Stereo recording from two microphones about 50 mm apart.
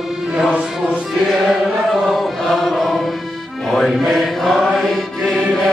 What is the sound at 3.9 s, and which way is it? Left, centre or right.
Mantra, centre.